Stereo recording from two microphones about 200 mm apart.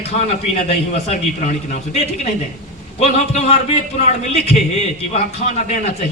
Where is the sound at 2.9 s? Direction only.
35° left (ahead or behind).